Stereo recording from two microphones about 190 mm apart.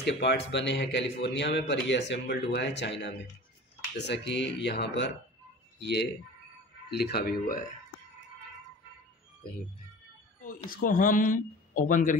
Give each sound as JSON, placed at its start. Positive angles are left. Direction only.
{"t": 0.0, "sound": "a man's voice", "side_deg": 65}
{"t": 6.9, "sound": "speech", "side_deg": 55}
{"t": 10.7, "sound": "speech", "side_deg": 45}